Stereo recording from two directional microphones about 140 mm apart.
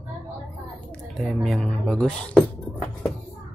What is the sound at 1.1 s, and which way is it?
Speech, centre (ahead or behind).